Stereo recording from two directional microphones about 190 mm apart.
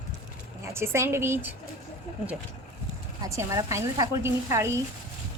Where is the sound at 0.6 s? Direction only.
15° right (ahead or behind).